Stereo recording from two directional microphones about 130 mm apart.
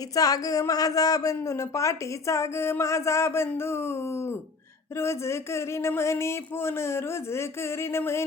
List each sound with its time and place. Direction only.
0.1 s speech: 25° left (ahead or behind)